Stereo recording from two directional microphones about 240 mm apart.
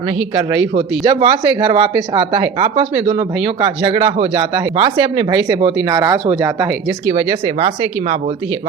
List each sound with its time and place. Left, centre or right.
1.0 s speech: centre
7.1 s speech: right